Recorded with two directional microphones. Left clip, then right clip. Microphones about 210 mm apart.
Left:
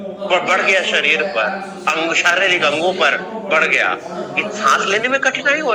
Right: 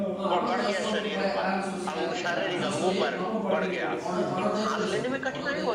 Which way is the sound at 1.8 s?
85° left.